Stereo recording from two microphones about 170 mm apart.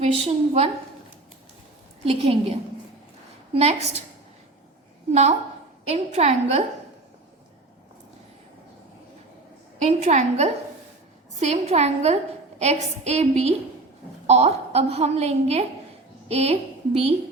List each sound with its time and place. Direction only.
0.0 s a woman's voice: 35° right (ahead or behind)
2.0 s a woman's voice: 35° right (ahead or behind)
5.9 s a woman's voice: 40° right (ahead or behind)
9.7 s a woman's voice: 40° right (ahead or behind)